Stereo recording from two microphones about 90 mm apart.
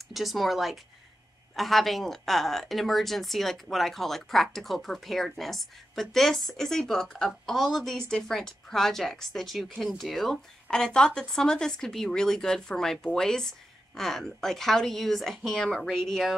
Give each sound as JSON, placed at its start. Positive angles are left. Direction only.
{"t": 0.1, "sound": "speech", "side_deg": 0}